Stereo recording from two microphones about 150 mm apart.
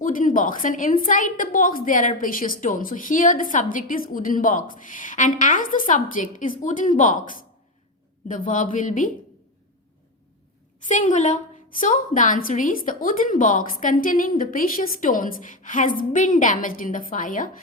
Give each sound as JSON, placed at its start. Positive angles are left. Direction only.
{"t": 0.0, "sound": "a woman's voice", "side_deg": 65}
{"t": 10.8, "sound": "a woman's voice", "side_deg": 55}